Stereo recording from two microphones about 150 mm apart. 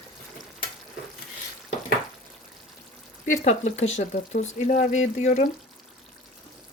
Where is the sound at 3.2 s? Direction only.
45° left (ahead or behind).